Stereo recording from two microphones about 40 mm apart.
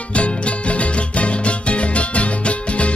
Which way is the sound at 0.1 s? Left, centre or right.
Left.